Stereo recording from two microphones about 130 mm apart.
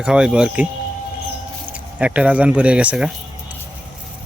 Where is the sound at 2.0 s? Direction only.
10° right (ahead or behind).